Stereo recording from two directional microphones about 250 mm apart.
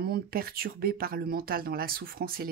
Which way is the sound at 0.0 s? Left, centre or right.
Right.